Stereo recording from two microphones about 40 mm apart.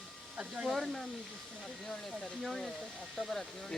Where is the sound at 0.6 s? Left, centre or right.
Centre.